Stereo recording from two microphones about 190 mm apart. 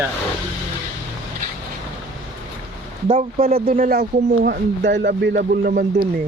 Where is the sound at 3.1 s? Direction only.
30° right (ahead or behind).